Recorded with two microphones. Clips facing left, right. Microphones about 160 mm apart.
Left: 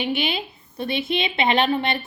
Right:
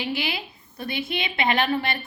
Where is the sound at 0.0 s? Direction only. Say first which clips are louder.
Left 4 dB; 20° left (ahead or behind).